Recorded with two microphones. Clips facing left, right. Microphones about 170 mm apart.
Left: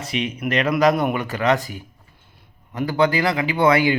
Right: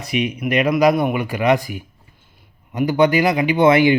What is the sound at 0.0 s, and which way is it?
Speech, 15° right (ahead or behind).